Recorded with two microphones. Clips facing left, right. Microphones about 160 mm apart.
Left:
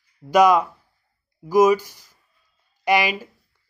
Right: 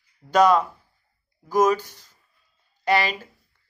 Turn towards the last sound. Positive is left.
turn(degrees=10)  # may be behind; listen again after turning